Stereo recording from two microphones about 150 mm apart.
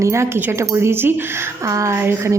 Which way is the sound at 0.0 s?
20° right (ahead or behind).